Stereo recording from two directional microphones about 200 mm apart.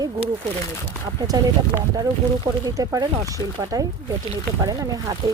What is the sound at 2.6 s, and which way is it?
Speech, 15° right (ahead or behind).